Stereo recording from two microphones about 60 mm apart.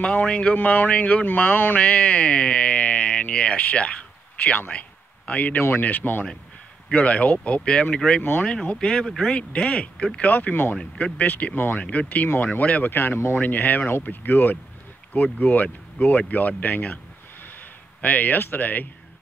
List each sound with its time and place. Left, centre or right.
0.0 s speech: centre
4.6 s a sound: left
5.6 s speech: left; by 8.2 s centre
8.2 s speech: left
8.6 s speech: centre
10.3 s speech: left
11.7 s speech: left
12.9 s speech: left
18.0 s speech: left